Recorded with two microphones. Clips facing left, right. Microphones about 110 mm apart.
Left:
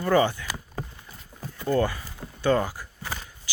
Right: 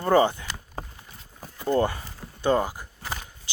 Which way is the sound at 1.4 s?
20° right (ahead or behind).